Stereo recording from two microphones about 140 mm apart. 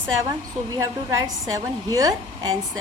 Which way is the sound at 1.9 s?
25° right (ahead or behind).